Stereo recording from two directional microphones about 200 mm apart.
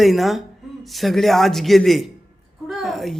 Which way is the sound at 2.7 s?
Centre (ahead or behind).